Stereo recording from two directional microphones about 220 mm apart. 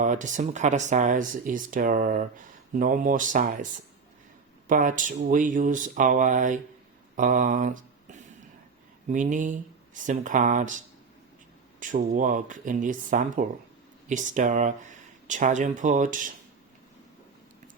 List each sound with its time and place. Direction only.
0.0 s speech: 35° right (ahead or behind)
4.7 s speech: 35° right (ahead or behind)